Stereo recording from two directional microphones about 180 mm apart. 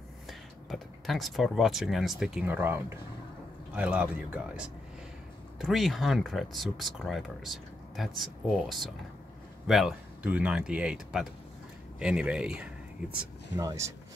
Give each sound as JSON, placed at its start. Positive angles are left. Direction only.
{"t": 0.3, "sound": "speech", "side_deg": 0}
{"t": 13.6, "sound": "speech", "side_deg": -20}